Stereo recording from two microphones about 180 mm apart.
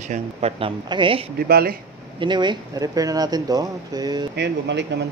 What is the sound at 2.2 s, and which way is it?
Speech, 25° right (ahead or behind).